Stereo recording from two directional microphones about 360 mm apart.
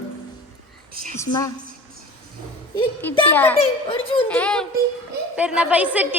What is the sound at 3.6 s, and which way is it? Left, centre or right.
Speech, centre.